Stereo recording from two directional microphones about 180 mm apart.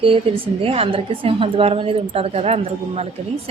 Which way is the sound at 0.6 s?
30° right (ahead or behind).